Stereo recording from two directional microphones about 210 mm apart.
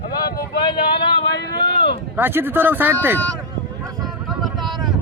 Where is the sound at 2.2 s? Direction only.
10° right (ahead or behind).